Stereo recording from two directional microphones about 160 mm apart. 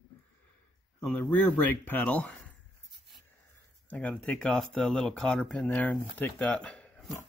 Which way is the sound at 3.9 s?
10° left (ahead or behind).